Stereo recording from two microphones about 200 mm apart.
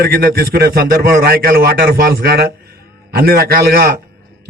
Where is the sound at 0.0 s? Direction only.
50° right (ahead or behind).